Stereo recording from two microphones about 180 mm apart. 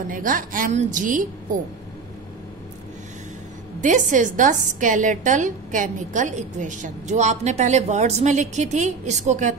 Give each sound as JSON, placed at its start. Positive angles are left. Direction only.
{"t": 0.1, "sound": "a woman's voice", "side_deg": -50}
{"t": 3.8, "sound": "a woman's voice", "side_deg": -45}